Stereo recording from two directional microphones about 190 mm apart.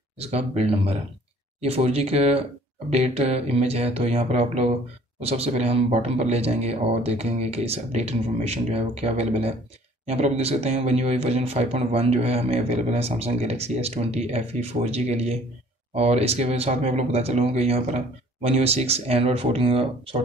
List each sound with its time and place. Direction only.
0.2 s speech: 35° right (ahead or behind)